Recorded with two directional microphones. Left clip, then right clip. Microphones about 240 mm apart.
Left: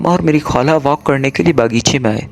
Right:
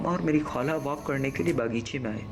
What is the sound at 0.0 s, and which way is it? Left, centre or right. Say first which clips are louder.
Speech: left 13 dB; left.